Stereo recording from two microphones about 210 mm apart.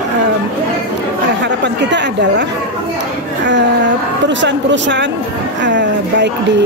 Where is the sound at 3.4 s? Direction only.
55° right (ahead or behind).